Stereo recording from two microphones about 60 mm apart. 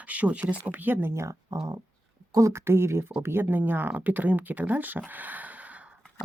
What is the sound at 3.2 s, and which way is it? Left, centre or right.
Speech, right.